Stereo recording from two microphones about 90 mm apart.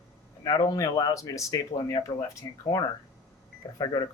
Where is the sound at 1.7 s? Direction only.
50° left (ahead or behind).